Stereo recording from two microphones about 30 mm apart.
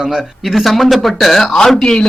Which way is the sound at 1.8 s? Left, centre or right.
Left.